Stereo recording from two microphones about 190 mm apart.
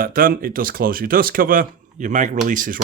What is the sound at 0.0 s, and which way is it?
Speech, 50° right (ahead or behind).